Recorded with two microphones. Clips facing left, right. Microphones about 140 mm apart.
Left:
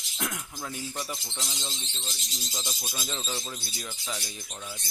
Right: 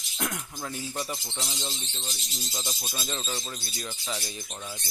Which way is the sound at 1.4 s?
10° right (ahead or behind).